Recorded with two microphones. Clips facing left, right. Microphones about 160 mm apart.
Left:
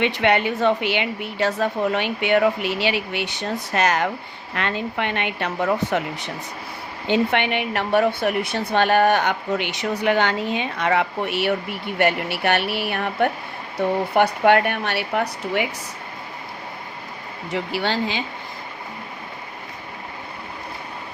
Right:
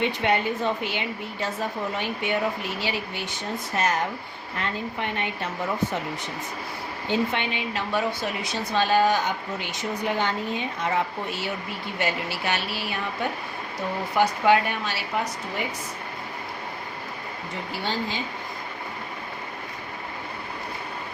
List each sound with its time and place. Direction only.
0.0 s a woman's voice: 75° left (ahead or behind)
17.5 s a woman's voice: 80° left